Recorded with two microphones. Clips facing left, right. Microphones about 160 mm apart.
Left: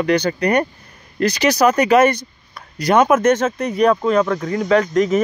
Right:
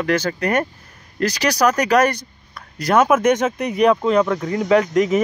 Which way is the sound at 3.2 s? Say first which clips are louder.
Left 1 dB; 15° right (ahead or behind).